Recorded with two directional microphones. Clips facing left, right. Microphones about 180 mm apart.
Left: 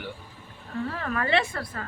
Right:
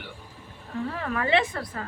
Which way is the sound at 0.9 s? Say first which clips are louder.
Right 2 dB; 10° right (ahead or behind).